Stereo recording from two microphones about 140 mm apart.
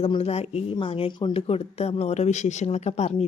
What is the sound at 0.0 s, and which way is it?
A woman's voice, 45° left (ahead or behind).